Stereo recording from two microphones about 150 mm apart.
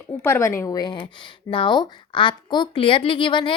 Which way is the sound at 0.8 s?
30° left (ahead or behind).